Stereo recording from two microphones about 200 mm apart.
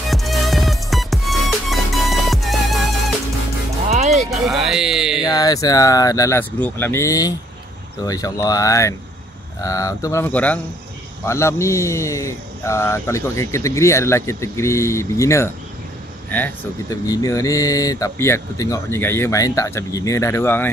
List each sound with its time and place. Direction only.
0.1 s music: centre (ahead or behind)
4.3 s music: centre (ahead or behind)
5.3 s speech: 20° left (ahead or behind)